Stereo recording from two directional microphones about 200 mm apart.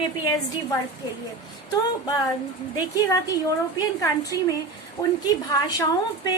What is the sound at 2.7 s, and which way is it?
Speech, 20° left (ahead or behind).